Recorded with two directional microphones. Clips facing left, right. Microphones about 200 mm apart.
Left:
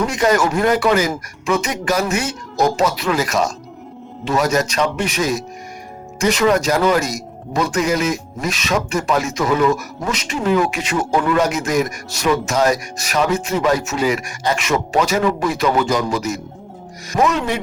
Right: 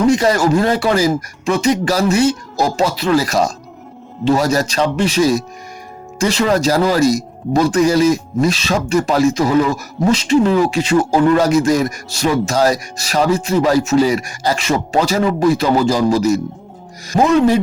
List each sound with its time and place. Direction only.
0.1 s speech: 30° right (ahead or behind)